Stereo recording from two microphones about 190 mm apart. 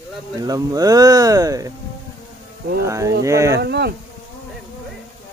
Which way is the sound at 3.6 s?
60° right (ahead or behind).